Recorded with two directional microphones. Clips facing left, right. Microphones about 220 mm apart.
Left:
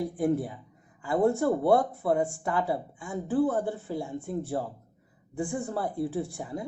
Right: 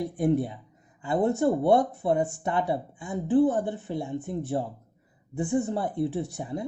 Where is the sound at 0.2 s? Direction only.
25° right (ahead or behind).